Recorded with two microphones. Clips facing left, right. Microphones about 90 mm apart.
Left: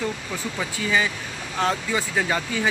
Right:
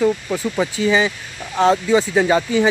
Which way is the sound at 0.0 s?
25° right (ahead or behind).